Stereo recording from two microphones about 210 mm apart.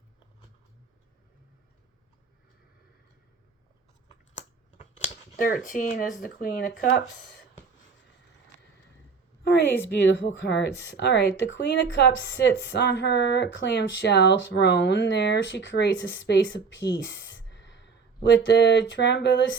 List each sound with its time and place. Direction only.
4.4 s a sound: 35° left (ahead or behind)
5.6 s a woman's voice: 40° left (ahead or behind)
9.4 s a woman's voice: 55° left (ahead or behind)